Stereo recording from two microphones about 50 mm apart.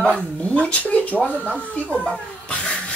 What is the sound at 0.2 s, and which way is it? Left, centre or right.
Speech, left.